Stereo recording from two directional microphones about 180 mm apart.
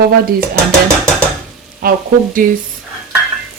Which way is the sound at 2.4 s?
50° right (ahead or behind).